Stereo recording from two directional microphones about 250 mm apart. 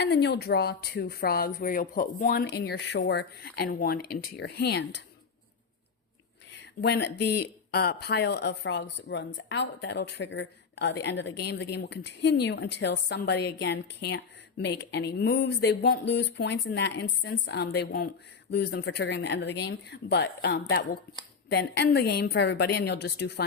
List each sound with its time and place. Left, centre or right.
0.0 s speech: left
6.6 s speech: left